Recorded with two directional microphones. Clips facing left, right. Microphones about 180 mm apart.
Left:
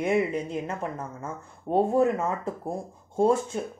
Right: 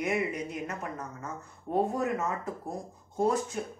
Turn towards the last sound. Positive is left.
turn(degrees=30)  # may be behind; listen again after turning